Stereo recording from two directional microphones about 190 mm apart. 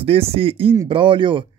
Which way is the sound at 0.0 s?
30° right (ahead or behind).